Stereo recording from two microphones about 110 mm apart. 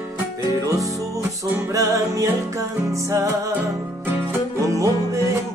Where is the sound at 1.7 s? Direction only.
30° right (ahead or behind).